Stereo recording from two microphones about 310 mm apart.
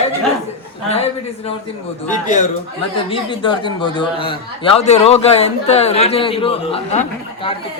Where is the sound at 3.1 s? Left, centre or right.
Centre.